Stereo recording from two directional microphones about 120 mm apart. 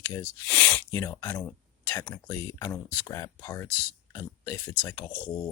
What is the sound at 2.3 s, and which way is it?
Speech, 20° left (ahead or behind).